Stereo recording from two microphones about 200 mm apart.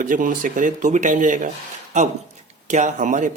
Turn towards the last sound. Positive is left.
turn(degrees=-40)  # may be behind; listen again after turning